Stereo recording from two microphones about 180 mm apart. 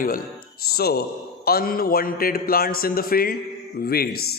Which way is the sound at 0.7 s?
60° left (ahead or behind).